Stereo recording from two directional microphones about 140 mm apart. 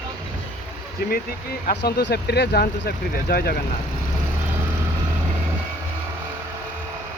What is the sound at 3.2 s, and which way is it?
Speech, 90° left.